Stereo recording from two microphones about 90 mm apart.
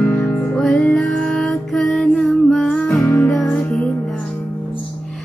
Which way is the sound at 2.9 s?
25° left (ahead or behind).